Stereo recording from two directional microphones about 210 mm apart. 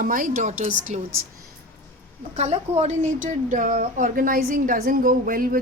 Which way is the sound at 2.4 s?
30° right (ahead or behind).